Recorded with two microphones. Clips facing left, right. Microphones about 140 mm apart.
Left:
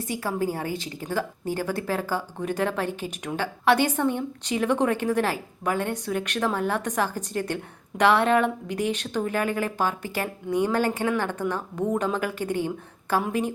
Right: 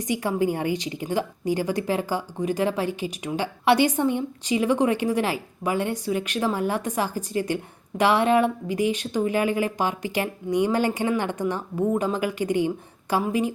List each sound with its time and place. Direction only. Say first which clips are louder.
0.2 s speech: right 1 dB; 15° right (ahead or behind)